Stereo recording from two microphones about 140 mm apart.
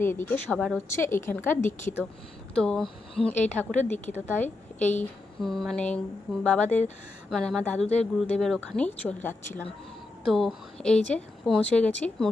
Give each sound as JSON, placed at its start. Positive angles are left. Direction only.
{"t": 0.0, "sound": "speech", "side_deg": 15}
{"t": 2.6, "sound": "speech", "side_deg": 5}
{"t": 5.4, "sound": "speech", "side_deg": 0}
{"t": 10.2, "sound": "speech", "side_deg": 0}